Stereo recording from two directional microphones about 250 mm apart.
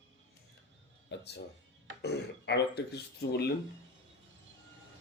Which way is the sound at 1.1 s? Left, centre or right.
Left.